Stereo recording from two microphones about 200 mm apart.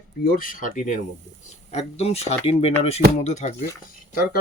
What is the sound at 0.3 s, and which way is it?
Speech, 45° left (ahead or behind).